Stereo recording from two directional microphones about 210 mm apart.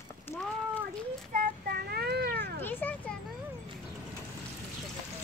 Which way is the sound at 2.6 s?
10° left (ahead or behind).